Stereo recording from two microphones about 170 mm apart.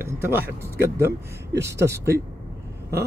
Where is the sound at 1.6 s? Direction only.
15° right (ahead or behind).